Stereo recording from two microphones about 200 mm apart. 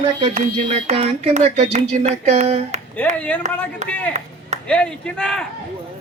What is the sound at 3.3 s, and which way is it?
A man's voice, 10° left (ahead or behind).